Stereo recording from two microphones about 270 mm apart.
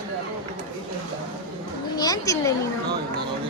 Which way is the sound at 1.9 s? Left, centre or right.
Centre.